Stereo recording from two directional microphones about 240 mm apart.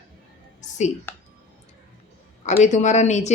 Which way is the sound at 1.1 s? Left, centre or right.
Centre.